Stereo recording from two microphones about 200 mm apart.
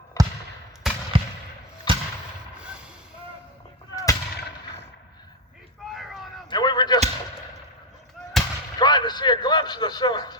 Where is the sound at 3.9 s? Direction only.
15° left (ahead or behind).